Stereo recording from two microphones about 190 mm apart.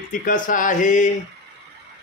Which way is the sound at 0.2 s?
45° left (ahead or behind).